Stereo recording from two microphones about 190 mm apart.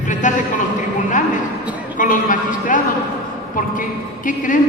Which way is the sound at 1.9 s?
45° left (ahead or behind).